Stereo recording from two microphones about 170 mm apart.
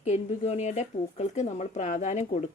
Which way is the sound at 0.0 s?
40° left (ahead or behind).